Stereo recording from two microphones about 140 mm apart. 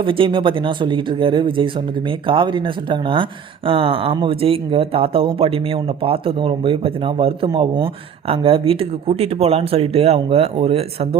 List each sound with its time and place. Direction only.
0.0 s speech: 40° right (ahead or behind)